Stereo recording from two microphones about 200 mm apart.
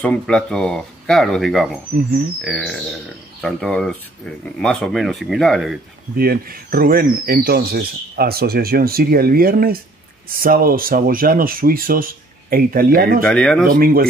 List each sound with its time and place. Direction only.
0.0 s speech: 5° left (ahead or behind)
6.1 s speech: 50° right (ahead or behind)
13.2 s speech: 5° left (ahead or behind)
13.7 s speech: 50° right (ahead or behind)